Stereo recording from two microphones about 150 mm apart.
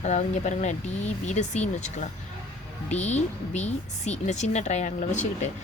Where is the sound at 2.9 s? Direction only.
50° left (ahead or behind).